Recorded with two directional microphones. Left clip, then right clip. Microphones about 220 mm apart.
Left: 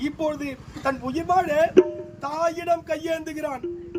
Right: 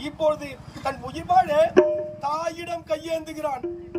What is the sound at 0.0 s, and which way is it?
A man's voice, 15° left (ahead or behind).